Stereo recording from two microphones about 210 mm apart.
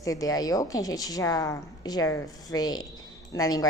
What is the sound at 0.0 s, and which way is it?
A woman's voice, 15° left (ahead or behind).